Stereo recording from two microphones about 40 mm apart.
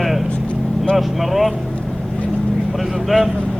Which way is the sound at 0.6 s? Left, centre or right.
Centre.